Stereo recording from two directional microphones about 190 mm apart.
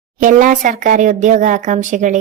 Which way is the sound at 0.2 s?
45° right (ahead or behind).